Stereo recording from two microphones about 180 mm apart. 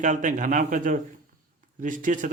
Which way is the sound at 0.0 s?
45° right (ahead or behind).